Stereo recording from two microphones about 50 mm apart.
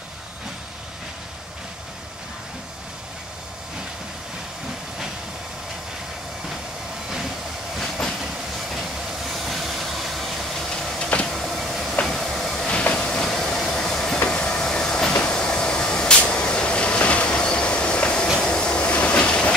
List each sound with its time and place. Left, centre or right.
8.7 s vehicle: centre
11.2 s train: centre
15.1 s vehicle: centre
16.3 s train: centre